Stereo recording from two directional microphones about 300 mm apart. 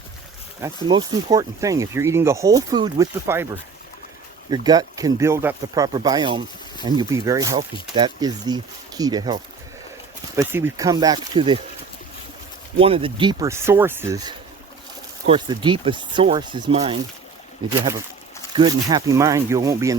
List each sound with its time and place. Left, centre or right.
0.6 s speech: centre
12.8 s speech: centre